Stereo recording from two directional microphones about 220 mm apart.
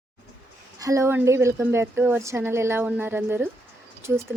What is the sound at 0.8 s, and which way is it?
Speech, 15° right (ahead or behind).